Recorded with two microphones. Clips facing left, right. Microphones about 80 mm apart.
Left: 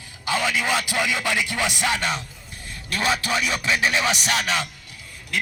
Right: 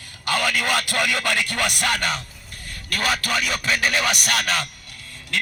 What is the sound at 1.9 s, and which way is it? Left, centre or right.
Speech, right.